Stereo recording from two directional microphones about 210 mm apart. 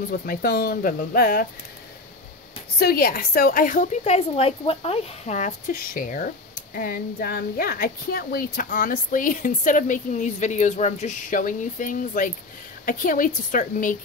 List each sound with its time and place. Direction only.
0.1 s speech: 45° left (ahead or behind)
2.8 s a woman's voice: 45° left (ahead or behind)